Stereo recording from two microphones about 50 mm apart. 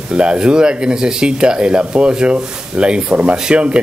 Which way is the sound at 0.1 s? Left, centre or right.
Right.